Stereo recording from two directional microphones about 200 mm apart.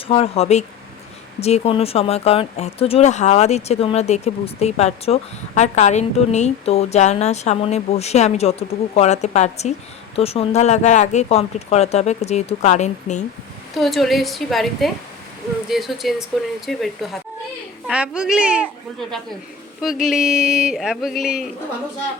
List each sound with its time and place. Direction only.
0.1 s speech: 30° left (ahead or behind)
13.7 s speech: centre (ahead or behind)